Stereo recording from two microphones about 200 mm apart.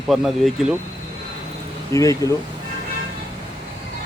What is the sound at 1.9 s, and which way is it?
Speech, 15° left (ahead or behind).